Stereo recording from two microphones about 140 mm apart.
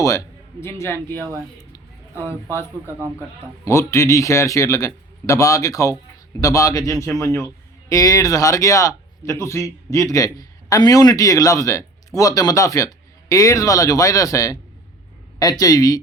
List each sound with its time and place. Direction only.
0.6 s speech: 20° left (ahead or behind)
2.2 s speech: 20° left (ahead or behind)